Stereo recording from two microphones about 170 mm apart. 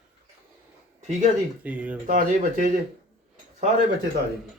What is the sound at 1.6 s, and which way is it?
Speech, 10° right (ahead or behind).